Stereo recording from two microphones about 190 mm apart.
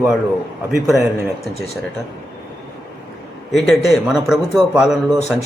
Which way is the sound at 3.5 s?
Centre (ahead or behind).